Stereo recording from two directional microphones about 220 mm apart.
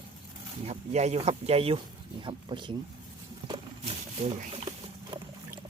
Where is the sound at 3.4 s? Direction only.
20° right (ahead or behind).